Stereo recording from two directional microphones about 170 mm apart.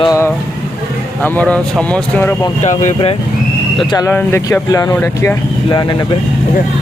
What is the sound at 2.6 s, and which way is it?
Speech, 45° left (ahead or behind).